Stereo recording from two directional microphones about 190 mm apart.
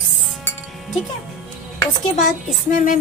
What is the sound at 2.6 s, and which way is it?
Speech, 40° left (ahead or behind).